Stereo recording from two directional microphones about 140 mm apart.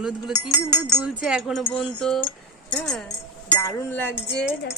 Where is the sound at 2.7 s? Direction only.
5° left (ahead or behind).